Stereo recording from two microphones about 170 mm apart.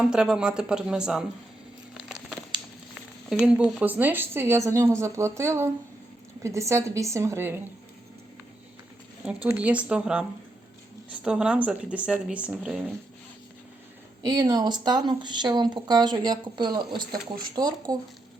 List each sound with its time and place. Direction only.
0.0 s speech: 5° right (ahead or behind)
2.0 s crumpling: 5° right (ahead or behind)
3.2 s speech: 5° right (ahead or behind)
9.2 s speech: 10° right (ahead or behind)
14.2 s speech: 20° right (ahead or behind)